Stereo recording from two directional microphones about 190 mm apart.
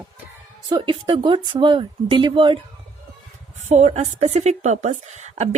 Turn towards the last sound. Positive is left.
turn(degrees=-40)  # may be behind; listen again after turning